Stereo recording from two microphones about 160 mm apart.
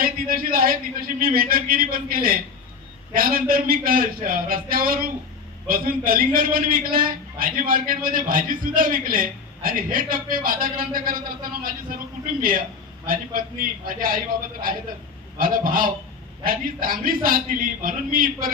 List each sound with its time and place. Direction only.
0.0 s a man's voice: 65° right (ahead or behind)